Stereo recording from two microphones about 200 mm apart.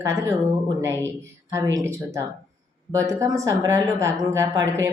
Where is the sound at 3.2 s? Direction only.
15° right (ahead or behind).